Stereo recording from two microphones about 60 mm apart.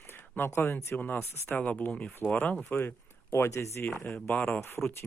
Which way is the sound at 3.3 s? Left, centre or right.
Left.